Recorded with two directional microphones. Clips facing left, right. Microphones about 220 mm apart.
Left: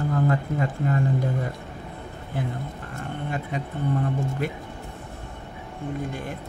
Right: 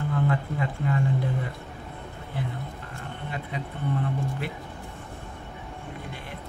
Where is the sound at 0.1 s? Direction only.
45° left (ahead or behind).